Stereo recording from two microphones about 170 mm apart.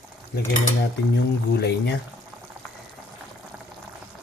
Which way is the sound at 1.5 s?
80° left.